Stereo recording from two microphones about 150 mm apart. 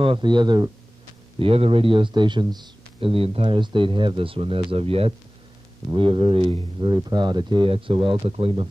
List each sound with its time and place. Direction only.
0.0 s speech: 35° right (ahead or behind)
1.4 s speech: 40° right (ahead or behind)